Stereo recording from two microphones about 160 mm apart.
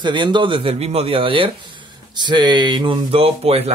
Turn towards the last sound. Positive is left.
turn(degrees=-40)  # may be behind; listen again after turning